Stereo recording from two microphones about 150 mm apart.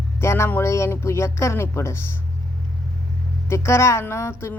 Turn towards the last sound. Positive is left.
turn(degrees=20)  # may be behind; listen again after turning